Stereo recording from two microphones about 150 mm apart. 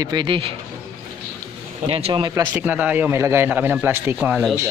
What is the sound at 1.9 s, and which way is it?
Speech, 40° right (ahead or behind).